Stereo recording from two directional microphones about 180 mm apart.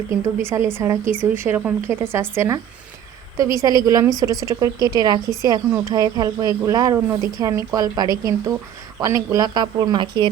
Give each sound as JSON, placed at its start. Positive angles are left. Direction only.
{"t": 0.1, "sound": "a woman's voice", "side_deg": -15}